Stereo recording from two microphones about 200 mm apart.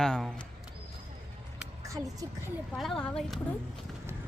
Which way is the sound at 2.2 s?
15° right (ahead or behind).